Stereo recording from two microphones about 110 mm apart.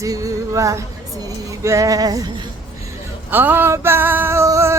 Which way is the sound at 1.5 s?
30° right (ahead or behind).